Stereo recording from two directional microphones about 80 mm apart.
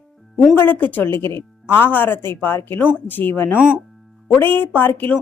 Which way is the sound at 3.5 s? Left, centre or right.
Centre.